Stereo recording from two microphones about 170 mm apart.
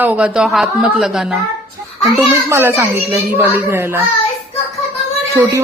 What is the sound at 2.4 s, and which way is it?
Speech, 15° right (ahead or behind).